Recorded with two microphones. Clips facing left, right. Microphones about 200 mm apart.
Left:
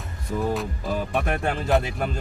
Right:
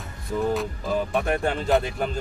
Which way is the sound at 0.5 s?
Centre (ahead or behind).